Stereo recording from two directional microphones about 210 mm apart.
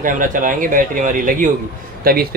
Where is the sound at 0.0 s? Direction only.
40° right (ahead or behind).